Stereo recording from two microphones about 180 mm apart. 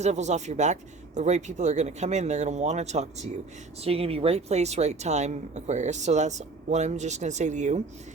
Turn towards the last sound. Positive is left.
turn(degrees=-40)  # may be behind; listen again after turning